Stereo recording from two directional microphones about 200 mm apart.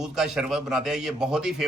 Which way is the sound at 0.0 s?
Centre (ahead or behind).